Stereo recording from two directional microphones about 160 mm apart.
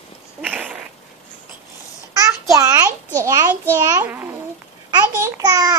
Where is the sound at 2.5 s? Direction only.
20° right (ahead or behind).